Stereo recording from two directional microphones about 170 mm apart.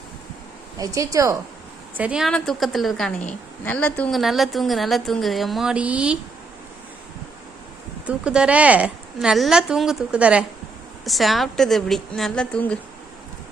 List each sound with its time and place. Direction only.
0.8 s speech: 20° right (ahead or behind)
2.0 s a woman's voice: 5° right (ahead or behind)
8.0 s a woman's voice: 5° right (ahead or behind)